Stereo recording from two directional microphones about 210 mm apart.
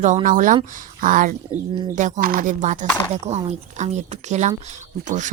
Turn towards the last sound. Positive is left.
turn(degrees=-35)  # may be behind; listen again after turning